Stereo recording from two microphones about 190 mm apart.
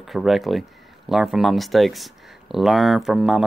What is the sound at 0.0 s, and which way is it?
Speech, centre (ahead or behind).